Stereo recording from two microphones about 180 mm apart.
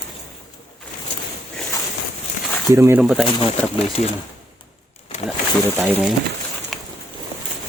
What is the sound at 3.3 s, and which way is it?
Speech, 35° left (ahead or behind).